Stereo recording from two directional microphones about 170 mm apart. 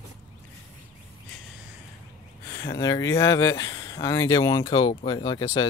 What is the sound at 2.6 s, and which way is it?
Speech, 20° left (ahead or behind).